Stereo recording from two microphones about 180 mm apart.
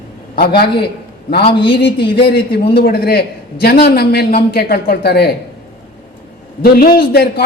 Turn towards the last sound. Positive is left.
turn(degrees=60)  # may be behind; listen again after turning